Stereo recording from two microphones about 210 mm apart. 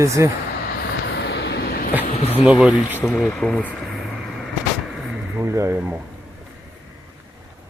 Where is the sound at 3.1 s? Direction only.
5° left (ahead or behind).